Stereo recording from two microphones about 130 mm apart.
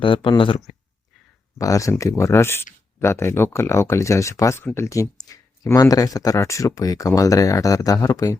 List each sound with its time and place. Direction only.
0.0 s speech: 40° left (ahead or behind)
1.5 s speech: 25° left (ahead or behind)